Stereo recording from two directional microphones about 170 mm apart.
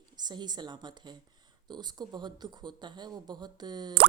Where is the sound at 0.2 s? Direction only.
25° right (ahead or behind).